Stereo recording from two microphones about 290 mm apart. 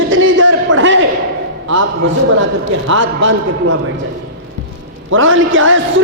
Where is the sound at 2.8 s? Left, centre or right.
Right.